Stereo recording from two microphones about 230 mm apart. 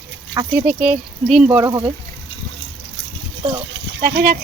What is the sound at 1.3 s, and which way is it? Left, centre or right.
Speech, centre.